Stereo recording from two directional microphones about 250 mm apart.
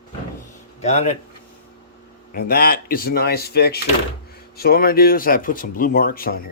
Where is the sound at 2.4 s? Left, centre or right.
Left.